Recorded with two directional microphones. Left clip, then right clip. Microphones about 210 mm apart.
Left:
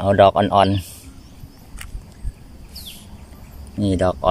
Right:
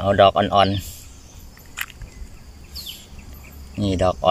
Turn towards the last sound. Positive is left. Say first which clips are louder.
# left 1 dB
turn(degrees=0)  # may be behind; listen again after turning